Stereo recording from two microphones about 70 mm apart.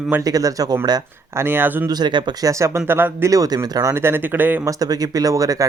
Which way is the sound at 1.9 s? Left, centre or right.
Right.